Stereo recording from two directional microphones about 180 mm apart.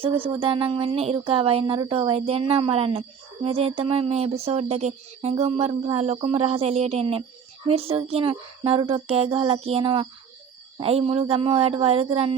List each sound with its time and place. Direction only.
0.0 s speech: 30° right (ahead or behind)